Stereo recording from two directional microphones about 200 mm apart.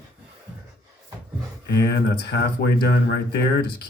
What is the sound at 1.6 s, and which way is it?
Speech, 55° left (ahead or behind).